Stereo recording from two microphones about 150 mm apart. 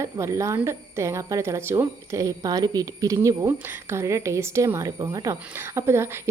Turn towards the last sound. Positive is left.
turn(degrees=-15)  # may be behind; listen again after turning